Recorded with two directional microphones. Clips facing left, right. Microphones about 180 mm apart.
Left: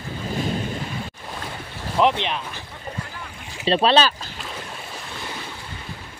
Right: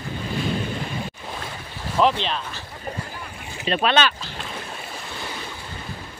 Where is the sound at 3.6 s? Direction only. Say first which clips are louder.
Left 3 dB; 30° left (ahead or behind).